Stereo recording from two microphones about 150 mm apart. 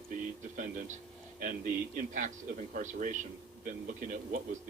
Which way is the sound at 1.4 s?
60° right (ahead or behind).